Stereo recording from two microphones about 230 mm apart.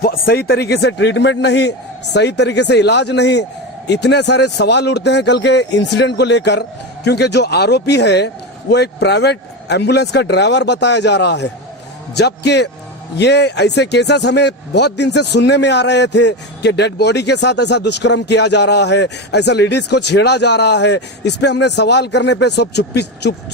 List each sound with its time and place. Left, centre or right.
0.0 s speech: left